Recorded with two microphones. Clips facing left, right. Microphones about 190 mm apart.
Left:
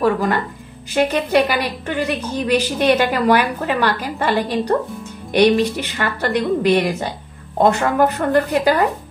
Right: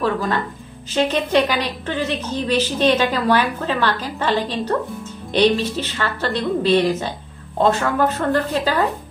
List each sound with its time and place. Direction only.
0.0 s a woman's voice: 15° left (ahead or behind)